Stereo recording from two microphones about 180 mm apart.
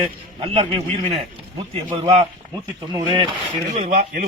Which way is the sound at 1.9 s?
30° right (ahead or behind).